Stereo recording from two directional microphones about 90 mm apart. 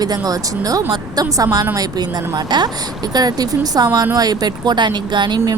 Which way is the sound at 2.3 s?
50° right (ahead or behind).